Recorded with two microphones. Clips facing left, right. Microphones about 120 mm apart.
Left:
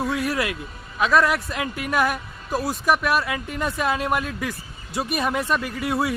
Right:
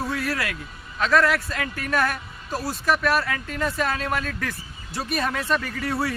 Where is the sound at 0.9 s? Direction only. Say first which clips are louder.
Left 1 dB; 15° left (ahead or behind).